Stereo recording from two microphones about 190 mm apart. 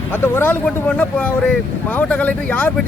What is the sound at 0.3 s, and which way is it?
Speech, 10° left (ahead or behind).